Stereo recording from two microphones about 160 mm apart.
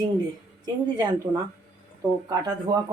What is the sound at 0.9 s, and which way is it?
Speech, 25° right (ahead or behind).